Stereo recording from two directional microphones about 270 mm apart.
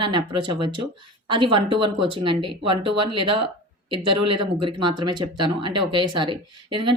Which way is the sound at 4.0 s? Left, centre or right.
Right.